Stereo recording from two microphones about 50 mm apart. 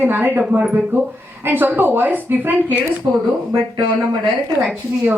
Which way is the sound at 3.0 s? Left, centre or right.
Right.